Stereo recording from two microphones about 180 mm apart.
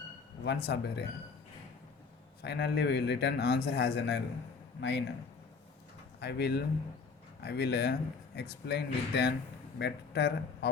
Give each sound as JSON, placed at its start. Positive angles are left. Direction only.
{"t": 0.4, "sound": "a man's voice", "side_deg": 65}
{"t": 2.4, "sound": "a man's voice", "side_deg": 70}
{"t": 6.1, "sound": "a man's voice", "side_deg": 65}